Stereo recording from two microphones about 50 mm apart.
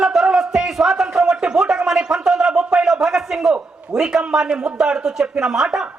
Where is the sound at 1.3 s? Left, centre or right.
Centre.